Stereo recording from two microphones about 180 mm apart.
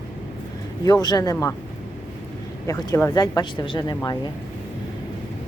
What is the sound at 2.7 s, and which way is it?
Speech, 15° left (ahead or behind).